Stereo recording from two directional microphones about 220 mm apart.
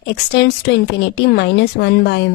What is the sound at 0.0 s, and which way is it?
A woman's voice, 50° left (ahead or behind).